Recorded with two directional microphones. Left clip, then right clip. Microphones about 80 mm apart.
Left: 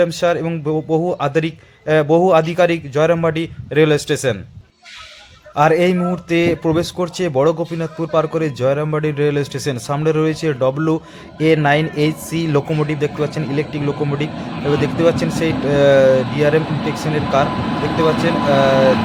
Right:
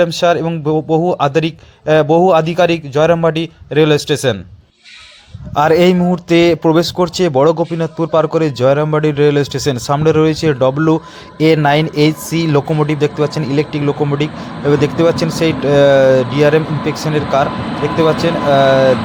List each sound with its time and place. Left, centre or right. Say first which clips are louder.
0.0 s a man's voice: right 4 dB; right
5.5 s a man's voice: right 3 dB; right